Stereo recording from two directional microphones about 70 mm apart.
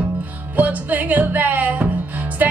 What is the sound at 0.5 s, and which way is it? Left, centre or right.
Music, right.